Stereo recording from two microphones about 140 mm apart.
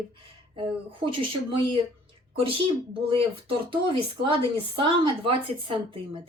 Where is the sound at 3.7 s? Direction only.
40° right (ahead or behind).